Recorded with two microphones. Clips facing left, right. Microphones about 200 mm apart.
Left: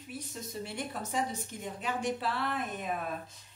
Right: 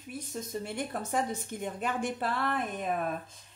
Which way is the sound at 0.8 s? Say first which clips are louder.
Right 2 dB; 55° right (ahead or behind).